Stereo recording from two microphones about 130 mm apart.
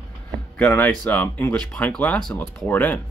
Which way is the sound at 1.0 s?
10° left (ahead or behind).